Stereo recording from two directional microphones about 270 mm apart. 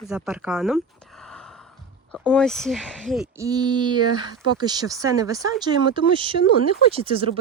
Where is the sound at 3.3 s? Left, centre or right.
Centre.